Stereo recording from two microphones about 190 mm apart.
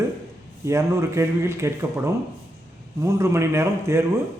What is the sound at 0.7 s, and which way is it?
A man's voice, 15° right (ahead or behind).